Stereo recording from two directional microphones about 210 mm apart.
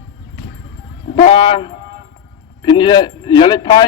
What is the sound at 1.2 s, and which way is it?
A man's voice, 25° left (ahead or behind).